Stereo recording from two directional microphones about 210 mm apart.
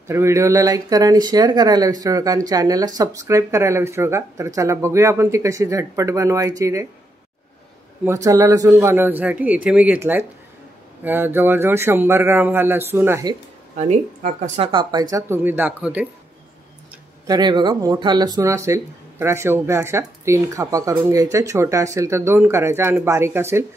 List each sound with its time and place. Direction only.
0.1 s speech: 15° right (ahead or behind)
8.0 s speech: 15° right (ahead or behind)
17.3 s speech: 20° right (ahead or behind)